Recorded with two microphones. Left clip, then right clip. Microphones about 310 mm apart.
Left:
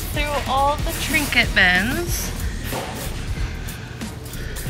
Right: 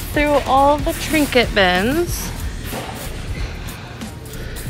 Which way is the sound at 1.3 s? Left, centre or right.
Centre.